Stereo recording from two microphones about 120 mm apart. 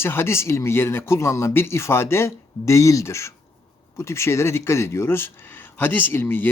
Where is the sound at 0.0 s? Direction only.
20° left (ahead or behind).